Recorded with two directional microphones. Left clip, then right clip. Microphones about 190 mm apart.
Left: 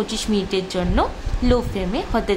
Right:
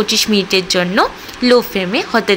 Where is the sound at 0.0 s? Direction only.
10° right (ahead or behind).